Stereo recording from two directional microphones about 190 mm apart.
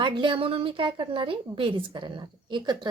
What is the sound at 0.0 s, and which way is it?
A woman's voice, 25° right (ahead or behind).